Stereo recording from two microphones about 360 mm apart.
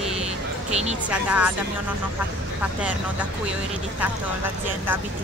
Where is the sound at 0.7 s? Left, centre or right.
Centre.